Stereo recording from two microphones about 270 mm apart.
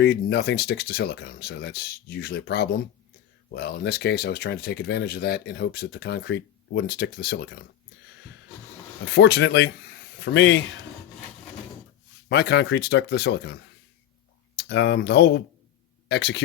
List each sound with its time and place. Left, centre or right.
0.0 s speech: left
9.1 s speech: left
12.3 s speech: left
14.6 s speech: left